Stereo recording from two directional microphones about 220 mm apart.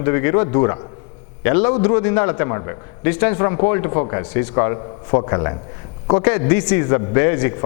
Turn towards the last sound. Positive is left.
turn(degrees=15)  # may be behind; listen again after turning